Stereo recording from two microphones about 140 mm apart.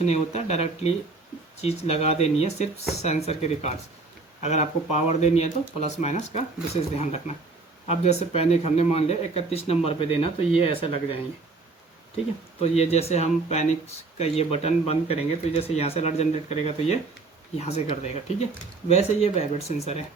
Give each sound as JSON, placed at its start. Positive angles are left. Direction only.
{"t": 0.0, "sound": "speech", "side_deg": 50}
{"t": 12.6, "sound": "speech", "side_deg": 50}